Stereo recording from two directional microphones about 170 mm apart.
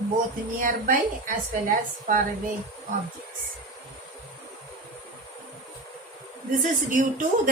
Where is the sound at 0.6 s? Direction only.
55° right (ahead or behind).